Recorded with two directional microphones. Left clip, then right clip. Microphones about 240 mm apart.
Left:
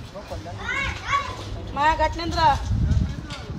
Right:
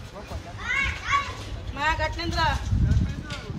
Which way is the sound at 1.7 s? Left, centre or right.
Left.